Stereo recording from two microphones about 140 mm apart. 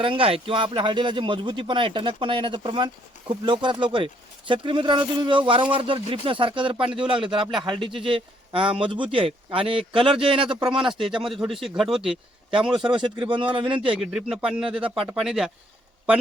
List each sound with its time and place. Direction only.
0.0 s speech: 40° right (ahead or behind)
11.2 s speech: 5° right (ahead or behind)
12.7 s speech: 35° right (ahead or behind)
14.0 s speech: 5° right (ahead or behind)